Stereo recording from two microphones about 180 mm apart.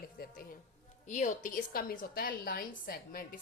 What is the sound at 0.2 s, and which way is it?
Speech, 55° left (ahead or behind).